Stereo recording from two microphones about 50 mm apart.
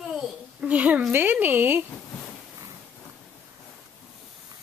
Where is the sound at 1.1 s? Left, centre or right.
Right.